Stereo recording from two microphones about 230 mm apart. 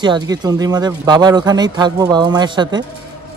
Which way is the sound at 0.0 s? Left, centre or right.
Centre.